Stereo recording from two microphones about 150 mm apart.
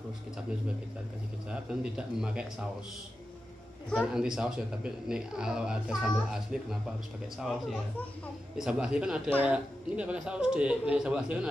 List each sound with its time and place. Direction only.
1.5 s a man's voice: 5° right (ahead or behind)
3.9 s a man's voice: 5° right (ahead or behind)